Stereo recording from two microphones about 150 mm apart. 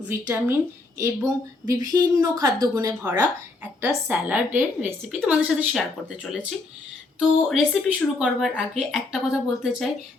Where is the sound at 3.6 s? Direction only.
10° right (ahead or behind).